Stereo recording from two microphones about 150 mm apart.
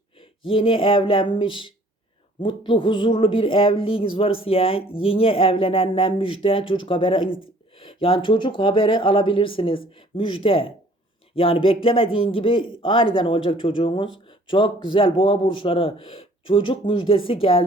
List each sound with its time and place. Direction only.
0.2 s speech: 35° left (ahead or behind)